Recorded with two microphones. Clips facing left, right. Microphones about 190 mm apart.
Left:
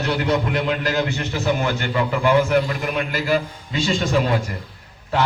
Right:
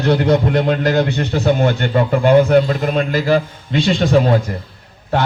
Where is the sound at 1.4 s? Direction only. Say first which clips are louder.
Right 6 dB; 55° right (ahead or behind).